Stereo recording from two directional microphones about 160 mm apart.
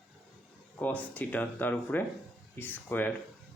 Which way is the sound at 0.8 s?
10° left (ahead or behind).